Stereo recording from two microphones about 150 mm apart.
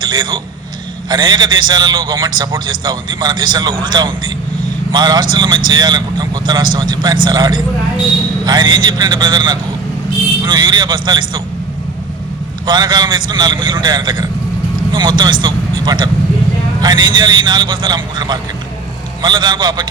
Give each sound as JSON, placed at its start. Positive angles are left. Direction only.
{"t": 0.0, "sound": "a sound", "side_deg": -30}
{"t": 1.1, "sound": "a man's voice", "side_deg": -30}
{"t": 12.6, "sound": "a man's voice", "side_deg": -25}